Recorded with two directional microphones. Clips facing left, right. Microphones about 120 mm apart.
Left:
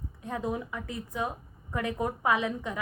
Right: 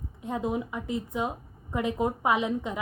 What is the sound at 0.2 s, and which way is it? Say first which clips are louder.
A woman's voice: right 3 dB; 20° right (ahead or behind).